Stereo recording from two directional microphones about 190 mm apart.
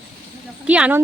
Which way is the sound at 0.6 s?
5° right (ahead or behind).